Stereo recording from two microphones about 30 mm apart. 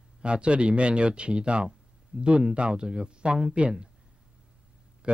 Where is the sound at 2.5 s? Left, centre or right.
Right.